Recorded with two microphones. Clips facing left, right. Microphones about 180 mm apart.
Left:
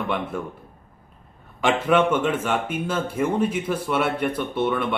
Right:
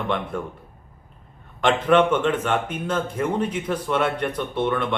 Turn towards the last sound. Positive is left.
turn(degrees=10)  # may be behind; listen again after turning